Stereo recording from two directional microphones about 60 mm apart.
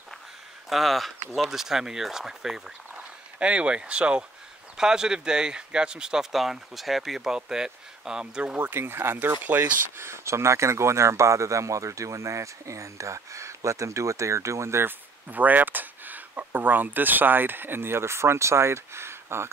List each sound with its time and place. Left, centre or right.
0.7 s speech: centre
3.3 s speech: centre
8.5 s speech: right
9.9 s speech: right
14.9 s speech: right